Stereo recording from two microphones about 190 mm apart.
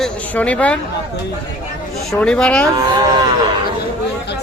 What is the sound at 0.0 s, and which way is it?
Speech, 5° left (ahead or behind).